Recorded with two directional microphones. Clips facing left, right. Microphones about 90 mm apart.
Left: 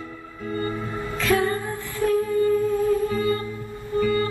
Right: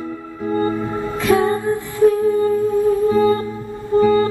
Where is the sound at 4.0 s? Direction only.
30° right (ahead or behind).